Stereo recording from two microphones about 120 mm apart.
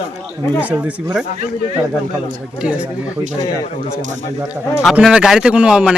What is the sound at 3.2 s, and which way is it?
Speech, 90° right.